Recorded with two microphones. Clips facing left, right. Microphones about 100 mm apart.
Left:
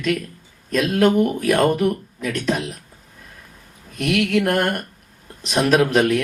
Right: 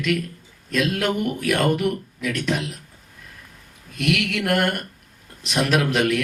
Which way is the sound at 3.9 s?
40° left (ahead or behind).